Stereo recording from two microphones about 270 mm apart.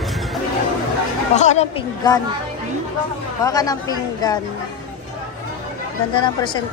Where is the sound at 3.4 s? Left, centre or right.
Centre.